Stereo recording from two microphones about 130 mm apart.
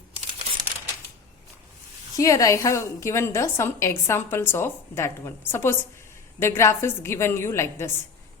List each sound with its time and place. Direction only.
2.1 s a woman's voice: 25° left (ahead or behind)